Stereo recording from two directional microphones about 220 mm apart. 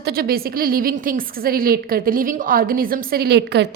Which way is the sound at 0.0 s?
45° right (ahead or behind).